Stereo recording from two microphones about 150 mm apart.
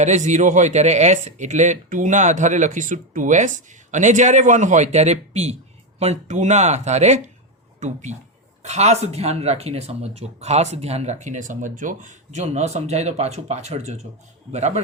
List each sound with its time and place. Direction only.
0.0 s speech: 50° right (ahead or behind)